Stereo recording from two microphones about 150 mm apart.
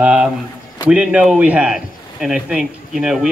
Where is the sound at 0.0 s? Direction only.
5° right (ahead or behind).